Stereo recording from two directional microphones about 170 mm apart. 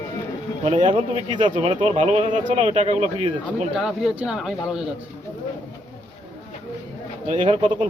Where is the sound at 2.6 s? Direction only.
35° right (ahead or behind).